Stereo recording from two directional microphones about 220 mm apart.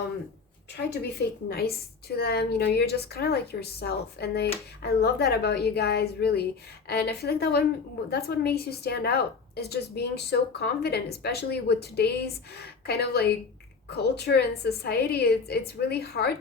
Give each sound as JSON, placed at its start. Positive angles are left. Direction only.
{"t": 0.9, "sound": "a woman's voice", "side_deg": 45}